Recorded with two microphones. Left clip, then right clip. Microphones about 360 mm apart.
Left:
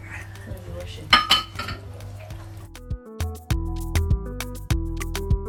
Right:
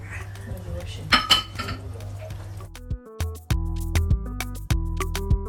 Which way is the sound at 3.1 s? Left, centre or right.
Centre.